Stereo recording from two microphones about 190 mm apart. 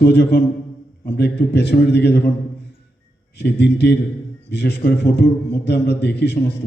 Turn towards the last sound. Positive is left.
turn(degrees=60)  # may be behind; listen again after turning